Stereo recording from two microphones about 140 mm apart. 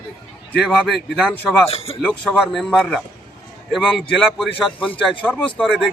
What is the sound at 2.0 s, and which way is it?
A man's voice, 10° left (ahead or behind).